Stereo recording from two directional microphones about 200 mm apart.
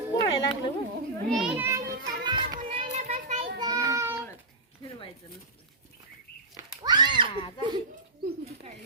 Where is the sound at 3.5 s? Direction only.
20° right (ahead or behind).